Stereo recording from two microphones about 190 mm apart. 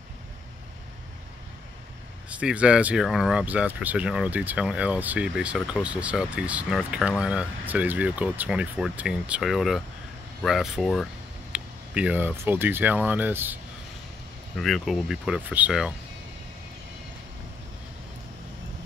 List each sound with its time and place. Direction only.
2.2 s speech: 5° right (ahead or behind)
14.6 s speech: centre (ahead or behind)